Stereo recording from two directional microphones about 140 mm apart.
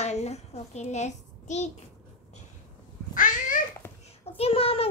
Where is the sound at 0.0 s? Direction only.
50° left (ahead or behind).